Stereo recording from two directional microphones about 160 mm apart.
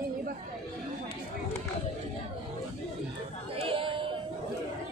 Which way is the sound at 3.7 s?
35° right (ahead or behind).